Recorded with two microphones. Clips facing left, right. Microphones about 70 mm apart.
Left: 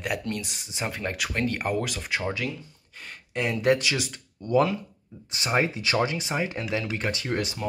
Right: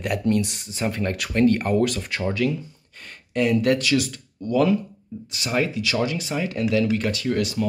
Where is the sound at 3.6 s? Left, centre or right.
Left.